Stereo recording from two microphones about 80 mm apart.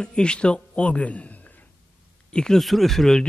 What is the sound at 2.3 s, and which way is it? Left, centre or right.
Speech, centre.